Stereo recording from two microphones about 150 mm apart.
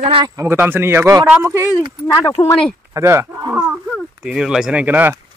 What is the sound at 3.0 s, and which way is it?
Speech, 20° right (ahead or behind).